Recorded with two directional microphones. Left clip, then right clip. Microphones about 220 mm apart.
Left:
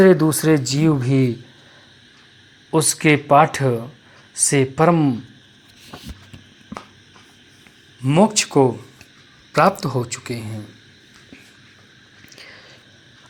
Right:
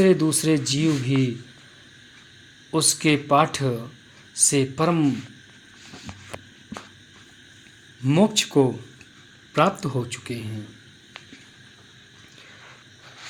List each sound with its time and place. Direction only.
0.0 s speech: 10° left (ahead or behind)
2.6 s speech: 20° left (ahead or behind)
8.0 s speech: 5° left (ahead or behind)